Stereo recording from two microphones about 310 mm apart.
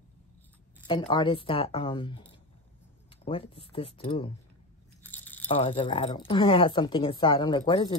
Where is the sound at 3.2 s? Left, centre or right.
Centre.